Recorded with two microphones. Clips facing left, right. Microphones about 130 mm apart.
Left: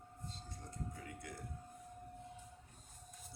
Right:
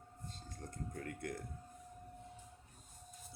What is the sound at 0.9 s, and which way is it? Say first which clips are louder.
Speech: right 6 dB; 55° right (ahead or behind).